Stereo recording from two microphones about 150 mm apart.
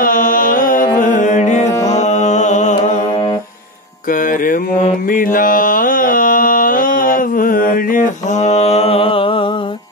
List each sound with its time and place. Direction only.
0.0 s music: 70° left (ahead or behind); by 3.0 s 50° left (ahead or behind)
4.1 s mantra: 65° left (ahead or behind); by 9.5 s 35° left (ahead or behind)